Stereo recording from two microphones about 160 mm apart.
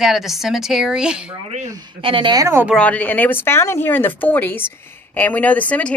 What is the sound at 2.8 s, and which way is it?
Speech, 10° left (ahead or behind).